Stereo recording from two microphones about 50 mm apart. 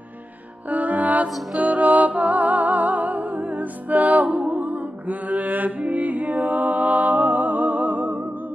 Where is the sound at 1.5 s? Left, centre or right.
Right.